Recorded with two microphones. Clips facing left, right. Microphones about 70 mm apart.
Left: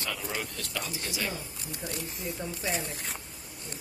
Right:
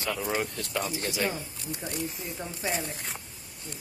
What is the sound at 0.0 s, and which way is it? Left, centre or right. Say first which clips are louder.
Speech: right 5 dB; right.